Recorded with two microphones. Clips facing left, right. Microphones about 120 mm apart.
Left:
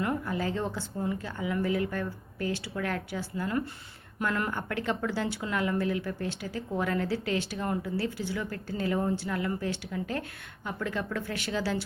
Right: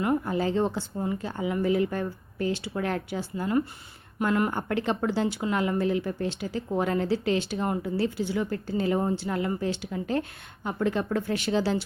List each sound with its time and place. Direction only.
0.0 s a woman's voice: 25° right (ahead or behind)